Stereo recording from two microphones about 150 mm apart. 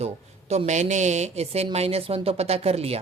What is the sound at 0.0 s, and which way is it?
A woman's voice, 45° right (ahead or behind).